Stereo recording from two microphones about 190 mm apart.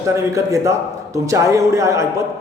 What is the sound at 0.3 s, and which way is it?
A man's voice, 15° right (ahead or behind).